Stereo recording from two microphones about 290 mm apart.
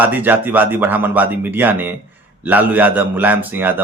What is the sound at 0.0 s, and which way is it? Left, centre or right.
A man's voice, centre.